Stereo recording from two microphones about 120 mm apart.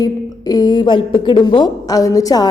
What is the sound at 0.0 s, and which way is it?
A woman's voice, 35° left (ahead or behind).